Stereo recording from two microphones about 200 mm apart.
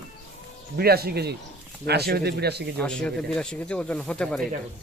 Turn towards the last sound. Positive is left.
turn(degrees=5)  # may be behind; listen again after turning